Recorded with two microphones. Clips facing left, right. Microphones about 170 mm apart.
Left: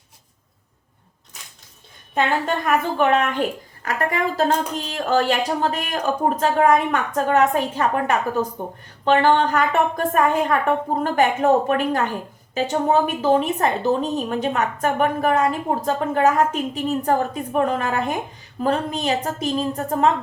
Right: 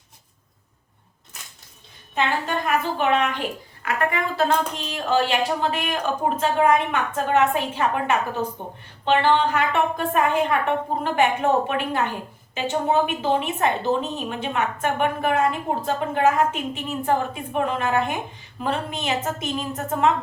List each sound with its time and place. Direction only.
2.6 s a woman's voice: 50° left (ahead or behind)